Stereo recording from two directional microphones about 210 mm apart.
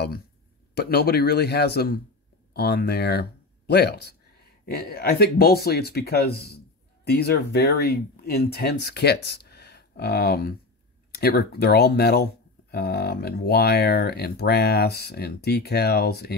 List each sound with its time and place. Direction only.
0.7 s speech: 45° left (ahead or behind)